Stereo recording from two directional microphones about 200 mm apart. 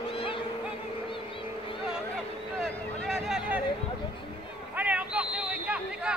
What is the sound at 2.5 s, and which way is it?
Vehicle, centre (ahead or behind).